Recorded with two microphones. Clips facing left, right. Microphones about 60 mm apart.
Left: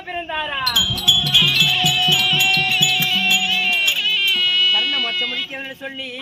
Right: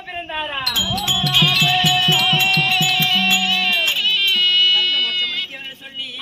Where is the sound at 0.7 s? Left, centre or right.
Right.